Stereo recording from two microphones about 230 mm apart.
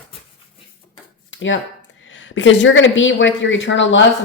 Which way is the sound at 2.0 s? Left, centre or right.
Left.